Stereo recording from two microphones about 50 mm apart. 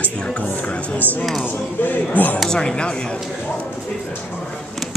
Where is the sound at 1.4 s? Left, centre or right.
Left.